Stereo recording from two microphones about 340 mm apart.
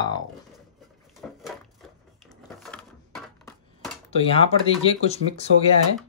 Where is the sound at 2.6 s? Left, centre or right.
Centre.